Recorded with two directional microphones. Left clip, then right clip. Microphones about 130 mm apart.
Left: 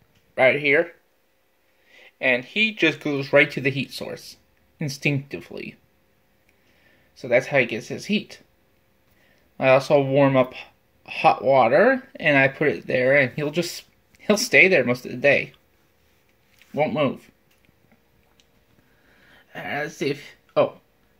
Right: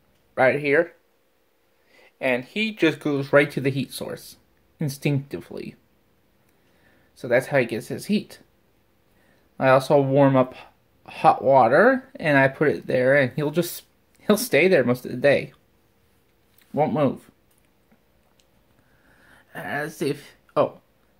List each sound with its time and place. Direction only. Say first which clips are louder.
0.4 s speech: left 1 dB; 15° right (ahead or behind)
2.0 s speech: left 2 dB; 10° right (ahead or behind)
7.2 s speech: left 1 dB; 15° right (ahead or behind)
9.6 s speech: even; 15° right (ahead or behind)
16.7 s speech: even; 25° right (ahead or behind)
19.2 s speech: left 1 dB; 5° right (ahead or behind)